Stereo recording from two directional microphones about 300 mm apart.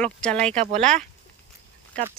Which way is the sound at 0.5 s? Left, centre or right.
Right.